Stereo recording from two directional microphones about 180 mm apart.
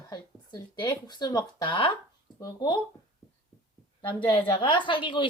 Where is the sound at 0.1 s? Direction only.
25° left (ahead or behind).